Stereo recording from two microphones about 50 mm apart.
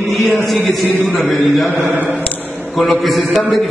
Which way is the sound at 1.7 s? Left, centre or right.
Left.